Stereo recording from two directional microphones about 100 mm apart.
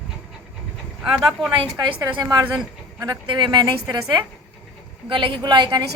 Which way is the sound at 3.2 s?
50° right (ahead or behind).